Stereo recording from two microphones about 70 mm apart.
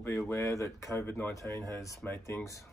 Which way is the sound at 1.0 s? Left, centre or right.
Left.